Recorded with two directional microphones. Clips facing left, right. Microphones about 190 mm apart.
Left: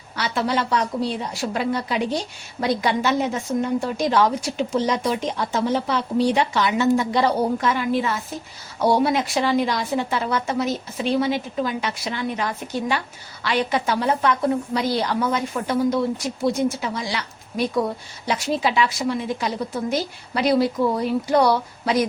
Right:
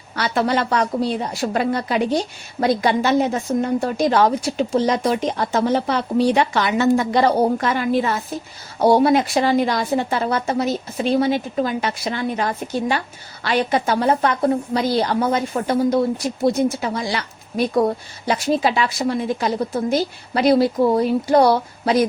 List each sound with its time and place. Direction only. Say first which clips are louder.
0.2 s a woman's voice: right 3 dB; 50° right (ahead or behind)
1.3 s a woman's voice: right 3 dB; 40° right (ahead or behind)